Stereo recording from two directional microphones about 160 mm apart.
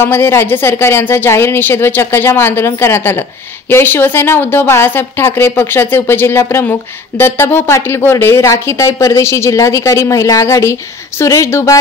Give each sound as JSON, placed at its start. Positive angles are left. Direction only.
{"t": 0.0, "sound": "speech", "side_deg": 15}